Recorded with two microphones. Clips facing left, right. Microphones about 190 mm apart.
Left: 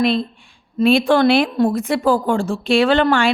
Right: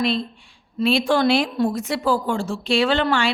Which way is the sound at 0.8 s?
50° left (ahead or behind).